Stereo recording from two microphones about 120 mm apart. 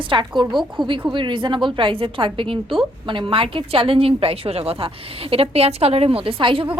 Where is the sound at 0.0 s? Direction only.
45° right (ahead or behind).